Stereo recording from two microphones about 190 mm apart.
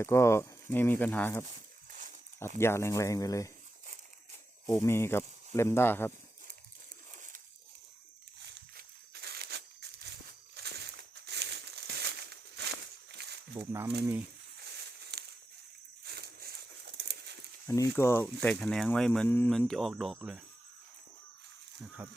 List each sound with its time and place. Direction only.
0.0 s speech: 15° left (ahead or behind)
1.5 s a sound: 40° right (ahead or behind)
2.6 s speech: 15° left (ahead or behind)
4.7 s speech: 15° left (ahead or behind)
8.4 s crumpling: 60° right (ahead or behind)
10.5 s a sound: 60° right (ahead or behind)
15.1 s a sound: 60° right (ahead or behind)
16.0 s crumpling: 55° right (ahead or behind)
17.7 s speech: 15° left (ahead or behind); by 20.4 s 5° right (ahead or behind)
22.0 s speech: 10° right (ahead or behind)